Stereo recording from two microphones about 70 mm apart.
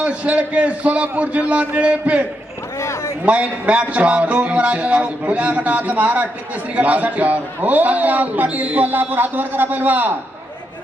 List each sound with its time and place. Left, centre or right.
0.0 s a man's voice: centre
2.8 s a man's voice: left
3.2 s a man's voice: centre